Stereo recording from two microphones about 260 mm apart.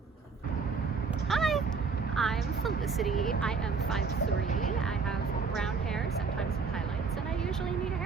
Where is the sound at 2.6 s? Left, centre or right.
Centre.